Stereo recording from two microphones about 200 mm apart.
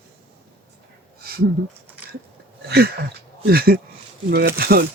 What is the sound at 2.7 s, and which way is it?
Speech, 50° right (ahead or behind).